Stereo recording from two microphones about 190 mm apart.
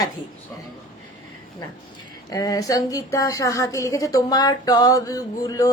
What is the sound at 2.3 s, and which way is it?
A woman's voice, 20° left (ahead or behind).